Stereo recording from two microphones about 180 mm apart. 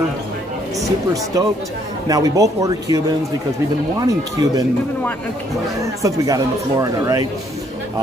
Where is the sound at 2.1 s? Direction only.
20° right (ahead or behind).